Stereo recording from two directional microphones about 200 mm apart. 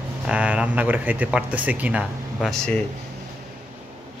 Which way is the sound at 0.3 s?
5° right (ahead or behind).